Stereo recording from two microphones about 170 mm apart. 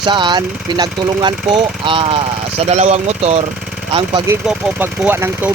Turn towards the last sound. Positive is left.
turn(degrees=-15)  # may be behind; listen again after turning